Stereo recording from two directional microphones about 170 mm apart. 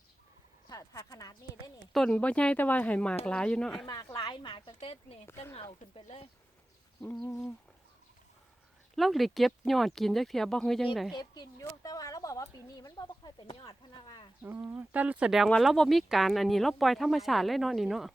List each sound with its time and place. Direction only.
0.7 s speech: 20° left (ahead or behind)
1.9 s speech: 5° left (ahead or behind)
3.8 s speech: 25° left (ahead or behind)
5.2 s speech: 15° left (ahead or behind)
7.0 s speech: 5° left (ahead or behind)
9.0 s speech: centre (ahead or behind)
11.1 s speech: 25° left (ahead or behind)
14.4 s speech: 10° right (ahead or behind)